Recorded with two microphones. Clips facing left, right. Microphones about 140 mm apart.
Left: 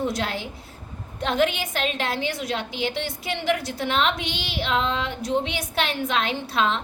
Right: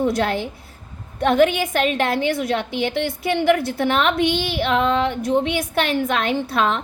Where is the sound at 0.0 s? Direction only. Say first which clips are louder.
Right 6 dB; 55° right (ahead or behind).